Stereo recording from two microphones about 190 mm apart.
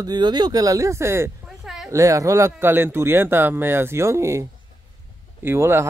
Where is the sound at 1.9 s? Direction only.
15° right (ahead or behind).